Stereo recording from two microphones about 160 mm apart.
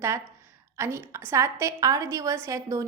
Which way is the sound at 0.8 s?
15° right (ahead or behind).